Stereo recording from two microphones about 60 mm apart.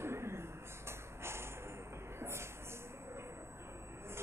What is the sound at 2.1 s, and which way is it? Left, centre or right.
Music, right.